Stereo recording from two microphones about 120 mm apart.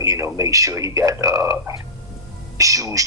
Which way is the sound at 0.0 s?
25° right (ahead or behind).